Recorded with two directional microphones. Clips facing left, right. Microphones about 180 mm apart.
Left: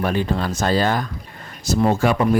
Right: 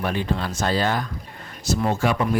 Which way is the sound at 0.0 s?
40° left (ahead or behind).